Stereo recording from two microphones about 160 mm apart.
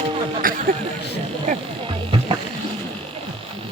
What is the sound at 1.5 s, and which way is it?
Music, 50° right (ahead or behind).